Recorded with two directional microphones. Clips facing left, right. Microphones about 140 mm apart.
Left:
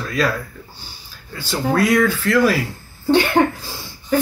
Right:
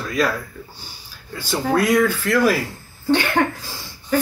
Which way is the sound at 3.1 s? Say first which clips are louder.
Left 3 dB; 20° left (ahead or behind).